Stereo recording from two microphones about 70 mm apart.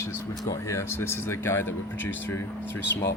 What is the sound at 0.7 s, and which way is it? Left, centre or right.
Speech, left.